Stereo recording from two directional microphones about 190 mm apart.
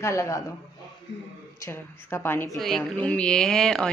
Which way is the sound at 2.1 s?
10° left (ahead or behind).